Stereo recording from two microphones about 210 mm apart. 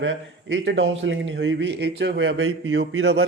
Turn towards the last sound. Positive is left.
turn(degrees=-60)  # may be behind; listen again after turning